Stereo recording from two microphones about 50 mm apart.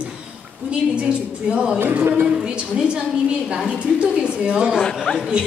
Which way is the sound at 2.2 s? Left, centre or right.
Centre.